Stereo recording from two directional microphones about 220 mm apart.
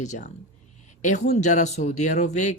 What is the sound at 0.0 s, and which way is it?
Speech, 35° left (ahead or behind).